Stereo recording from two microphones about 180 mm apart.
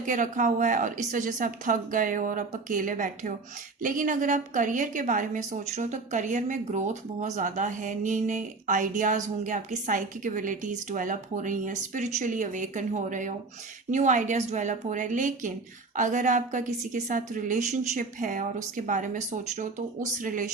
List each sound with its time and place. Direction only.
0.0 s a woman's voice: 45° right (ahead or behind)